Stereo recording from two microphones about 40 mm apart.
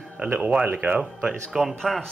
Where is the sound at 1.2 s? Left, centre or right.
Centre.